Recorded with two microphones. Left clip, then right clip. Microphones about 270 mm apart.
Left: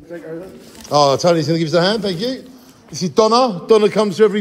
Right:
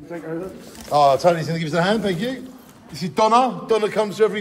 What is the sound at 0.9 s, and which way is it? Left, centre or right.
A man's voice, left.